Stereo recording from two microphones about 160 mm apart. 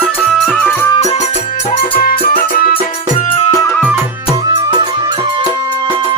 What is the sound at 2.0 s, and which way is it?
Music, 65° left (ahead or behind).